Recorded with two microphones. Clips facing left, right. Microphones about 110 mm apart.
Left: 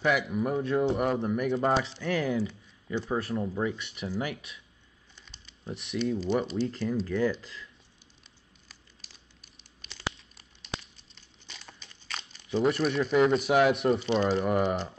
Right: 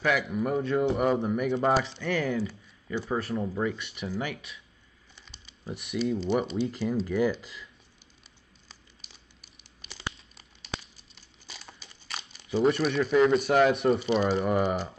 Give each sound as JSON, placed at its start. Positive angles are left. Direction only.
{"t": 0.0, "sound": "speech", "side_deg": 5}
{"t": 2.4, "sound": "a sound", "side_deg": -10}
{"t": 3.1, "sound": "speech", "side_deg": 0}
{"t": 5.1, "sound": "typing", "side_deg": 0}
{"t": 6.6, "sound": "speech", "side_deg": -10}
{"t": 9.8, "sound": "crumpling", "side_deg": -5}